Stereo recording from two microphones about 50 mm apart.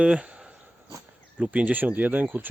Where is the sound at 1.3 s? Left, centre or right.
Right.